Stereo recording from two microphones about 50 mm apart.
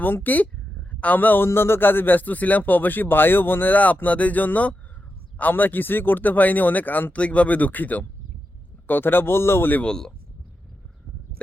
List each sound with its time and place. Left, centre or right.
0.0 s speech: left
1.5 s speech: left
7.2 s speech: left
8.9 s speech: left
9.8 s speech: centre